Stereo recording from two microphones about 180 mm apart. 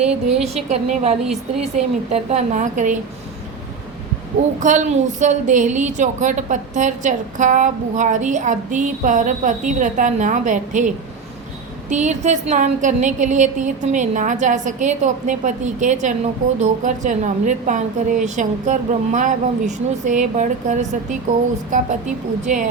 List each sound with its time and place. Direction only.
0.4 s a woman's voice: 35° right (ahead or behind)
1.2 s a woman's voice: 5° right (ahead or behind)
1.6 s a woman's voice: 40° right (ahead or behind)
4.6 s a woman's voice: 45° right (ahead or behind)